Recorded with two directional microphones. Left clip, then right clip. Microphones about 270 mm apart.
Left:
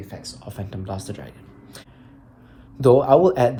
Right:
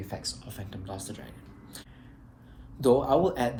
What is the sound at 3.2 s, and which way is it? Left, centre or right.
Speech, centre.